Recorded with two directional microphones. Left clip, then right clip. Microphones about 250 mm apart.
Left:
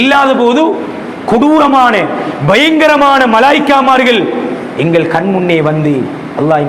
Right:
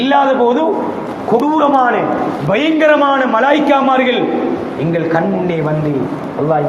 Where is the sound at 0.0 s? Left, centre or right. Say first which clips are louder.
Left 3 dB; left.